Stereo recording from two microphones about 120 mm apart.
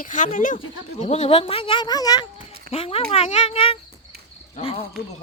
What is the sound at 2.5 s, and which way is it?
Speech, 55° left (ahead or behind).